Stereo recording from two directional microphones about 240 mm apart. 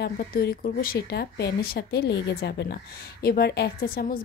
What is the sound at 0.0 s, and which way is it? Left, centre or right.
Speech, left.